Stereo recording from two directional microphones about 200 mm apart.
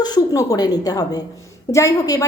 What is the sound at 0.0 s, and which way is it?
A woman's voice, 20° left (ahead or behind).